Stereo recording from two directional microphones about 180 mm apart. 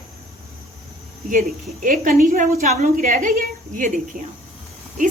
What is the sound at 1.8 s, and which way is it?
Speech, 50° right (ahead or behind).